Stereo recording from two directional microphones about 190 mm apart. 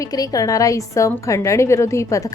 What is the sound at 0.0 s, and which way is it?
A woman's voice, 20° left (ahead or behind).